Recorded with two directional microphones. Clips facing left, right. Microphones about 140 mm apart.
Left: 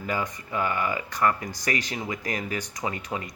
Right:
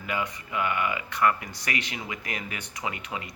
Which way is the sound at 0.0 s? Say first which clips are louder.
Left 2 dB; 35° left (ahead or behind).